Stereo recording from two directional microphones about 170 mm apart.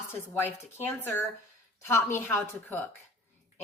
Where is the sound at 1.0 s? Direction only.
10° left (ahead or behind).